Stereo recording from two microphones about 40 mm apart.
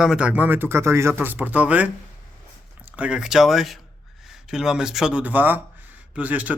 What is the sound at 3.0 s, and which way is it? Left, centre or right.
Speech, right.